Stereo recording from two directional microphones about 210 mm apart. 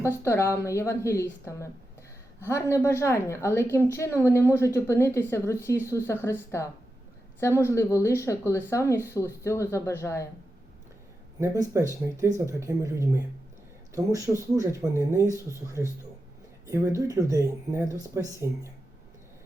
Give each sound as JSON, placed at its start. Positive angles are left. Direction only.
{"t": 0.0, "sound": "a woman's voice", "side_deg": 10}
{"t": 11.3, "sound": "speech", "side_deg": -15}